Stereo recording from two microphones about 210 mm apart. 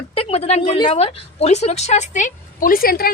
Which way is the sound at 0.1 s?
25° left (ahead or behind).